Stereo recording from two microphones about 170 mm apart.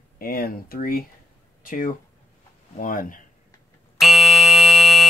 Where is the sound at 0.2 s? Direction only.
60° left (ahead or behind).